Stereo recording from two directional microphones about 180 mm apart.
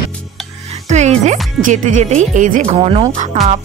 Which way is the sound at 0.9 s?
40° right (ahead or behind).